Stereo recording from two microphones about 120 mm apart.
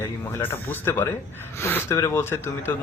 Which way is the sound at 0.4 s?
20° left (ahead or behind).